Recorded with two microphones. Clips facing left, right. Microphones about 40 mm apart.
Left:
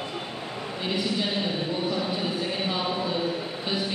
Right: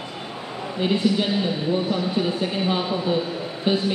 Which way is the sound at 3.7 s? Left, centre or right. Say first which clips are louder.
Right 8 dB; right.